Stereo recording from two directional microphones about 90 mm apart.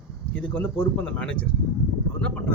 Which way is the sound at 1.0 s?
15° left (ahead or behind).